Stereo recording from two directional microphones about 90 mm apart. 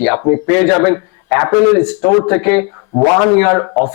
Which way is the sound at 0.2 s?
25° left (ahead or behind).